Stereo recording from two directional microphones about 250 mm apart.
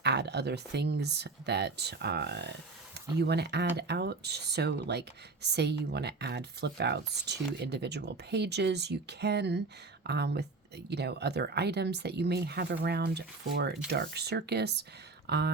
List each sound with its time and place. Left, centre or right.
0.0 s speech: right